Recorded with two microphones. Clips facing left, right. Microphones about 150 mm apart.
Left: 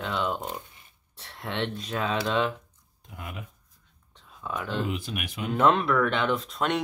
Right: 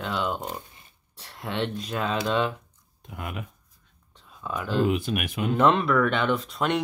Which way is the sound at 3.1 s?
70° right (ahead or behind).